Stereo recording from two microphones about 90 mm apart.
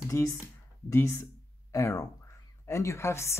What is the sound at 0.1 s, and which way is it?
Speech, 35° left (ahead or behind).